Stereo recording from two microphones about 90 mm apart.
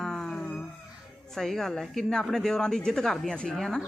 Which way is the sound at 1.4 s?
5° left (ahead or behind).